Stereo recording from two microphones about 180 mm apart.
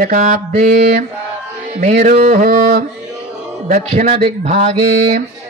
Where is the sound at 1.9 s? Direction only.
60° right (ahead or behind).